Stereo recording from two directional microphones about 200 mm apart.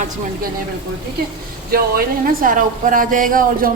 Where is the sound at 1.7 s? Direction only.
50° right (ahead or behind).